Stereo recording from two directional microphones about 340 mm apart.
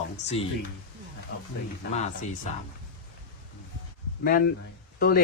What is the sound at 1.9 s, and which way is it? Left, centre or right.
Speech, left.